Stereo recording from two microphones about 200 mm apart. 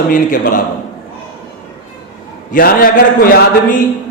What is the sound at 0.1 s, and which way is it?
Speech, 40° left (ahead or behind).